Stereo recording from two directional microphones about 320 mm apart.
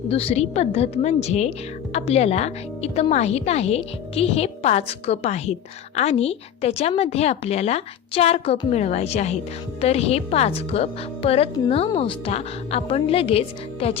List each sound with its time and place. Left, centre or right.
0.1 s a woman's voice: centre